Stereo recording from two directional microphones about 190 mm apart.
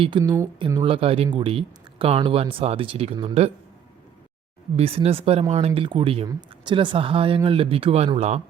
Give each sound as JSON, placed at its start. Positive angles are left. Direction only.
{"t": 0.0, "sound": "speech", "side_deg": -25}
{"t": 4.8, "sound": "speech", "side_deg": -30}